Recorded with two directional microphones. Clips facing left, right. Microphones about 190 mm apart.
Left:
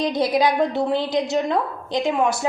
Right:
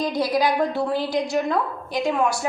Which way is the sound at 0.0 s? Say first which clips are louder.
Left 2 dB; 20° left (ahead or behind).